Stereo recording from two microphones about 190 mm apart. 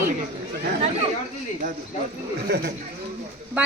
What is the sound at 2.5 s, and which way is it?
Speech, 60° right (ahead or behind).